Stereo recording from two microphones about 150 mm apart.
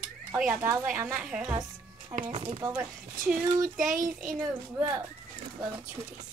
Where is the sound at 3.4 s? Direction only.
20° right (ahead or behind).